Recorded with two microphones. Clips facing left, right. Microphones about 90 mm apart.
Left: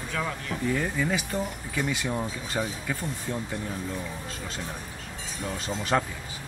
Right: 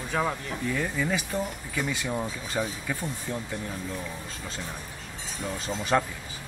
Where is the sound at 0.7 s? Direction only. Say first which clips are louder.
Even; centre (ahead or behind).